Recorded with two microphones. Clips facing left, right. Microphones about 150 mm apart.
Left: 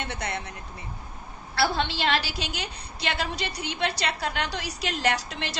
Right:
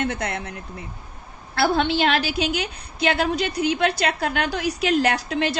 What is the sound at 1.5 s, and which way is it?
A woman's voice, 50° right (ahead or behind).